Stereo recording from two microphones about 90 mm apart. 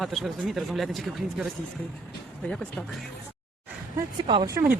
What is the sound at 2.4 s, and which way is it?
Speech, 10° left (ahead or behind).